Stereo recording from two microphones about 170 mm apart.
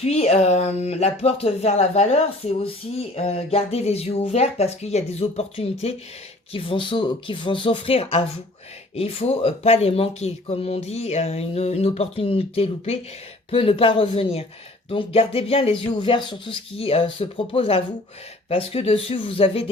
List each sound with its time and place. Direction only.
0.0 s speech: 40° left (ahead or behind)